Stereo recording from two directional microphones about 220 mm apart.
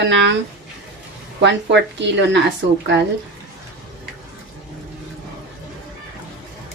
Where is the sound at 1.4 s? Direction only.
55° right (ahead or behind).